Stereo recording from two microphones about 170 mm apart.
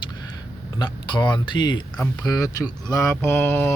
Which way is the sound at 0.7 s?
25° left (ahead or behind).